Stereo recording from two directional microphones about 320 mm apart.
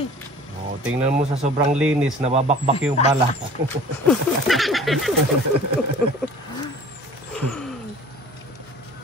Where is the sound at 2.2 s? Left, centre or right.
Centre.